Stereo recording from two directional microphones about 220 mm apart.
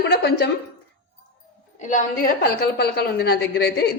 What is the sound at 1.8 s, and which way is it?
Speech, 35° left (ahead or behind).